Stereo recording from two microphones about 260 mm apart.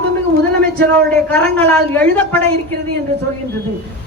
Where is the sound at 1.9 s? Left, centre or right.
Centre.